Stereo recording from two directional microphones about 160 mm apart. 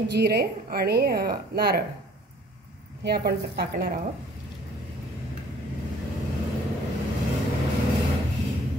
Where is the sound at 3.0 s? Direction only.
80° right.